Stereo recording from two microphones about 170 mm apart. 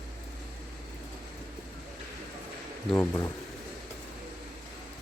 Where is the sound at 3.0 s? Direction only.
20° left (ahead or behind).